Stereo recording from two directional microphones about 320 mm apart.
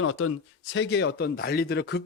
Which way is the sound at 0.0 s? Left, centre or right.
Left.